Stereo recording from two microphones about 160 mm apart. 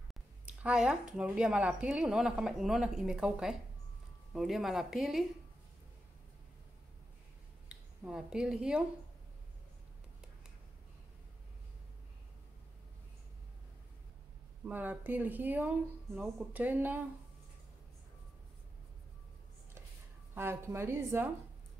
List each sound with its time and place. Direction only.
0.1 s speech: 5° right (ahead or behind)
7.6 s speech: 5° right (ahead or behind)
14.7 s speech: 10° right (ahead or behind)
20.3 s speech: 15° right (ahead or behind)